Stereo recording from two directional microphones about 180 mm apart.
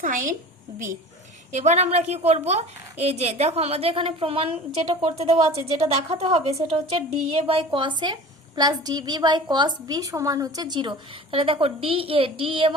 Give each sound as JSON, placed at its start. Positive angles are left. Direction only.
{"t": 0.0, "sound": "a woman's voice", "side_deg": -50}
{"t": 1.5, "sound": "a woman's voice", "side_deg": -40}